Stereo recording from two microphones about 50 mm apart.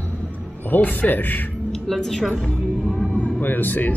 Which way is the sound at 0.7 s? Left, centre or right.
Left.